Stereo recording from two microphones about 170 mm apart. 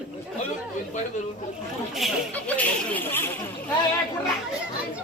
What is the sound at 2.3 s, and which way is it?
Speech, 10° left (ahead or behind).